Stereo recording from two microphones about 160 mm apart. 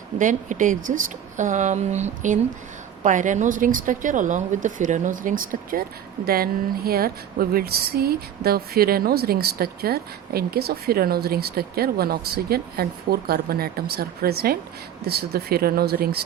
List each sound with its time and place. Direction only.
0.2 s a woman's voice: 50° right (ahead or behind); by 16.2 s 75° right (ahead or behind)